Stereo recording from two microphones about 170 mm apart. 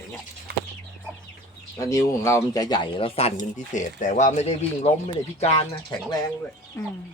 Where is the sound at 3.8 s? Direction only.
45° left (ahead or behind).